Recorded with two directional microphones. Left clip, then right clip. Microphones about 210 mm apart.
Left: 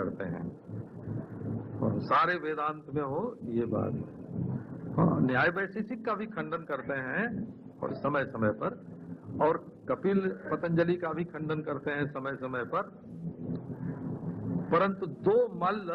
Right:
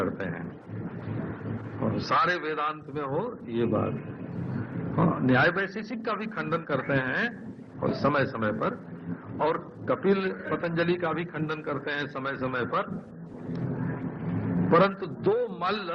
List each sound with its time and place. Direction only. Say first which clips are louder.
0.0 s a sound: right 5 dB; 25° right (ahead or behind)
1.8 s a man's voice: right 2 dB; 25° right (ahead or behind)
4.9 s a man's voice: right 4 dB; 25° right (ahead or behind)
14.6 s a man's voice: right 5 dB; 25° right (ahead or behind)